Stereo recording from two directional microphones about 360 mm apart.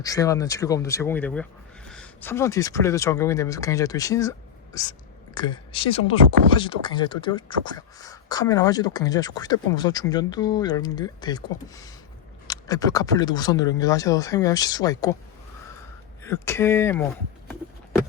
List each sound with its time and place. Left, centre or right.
0.0 s speech: centre
16.2 s speech: centre